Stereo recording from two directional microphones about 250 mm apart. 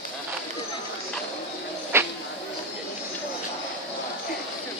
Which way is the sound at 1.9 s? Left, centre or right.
Centre.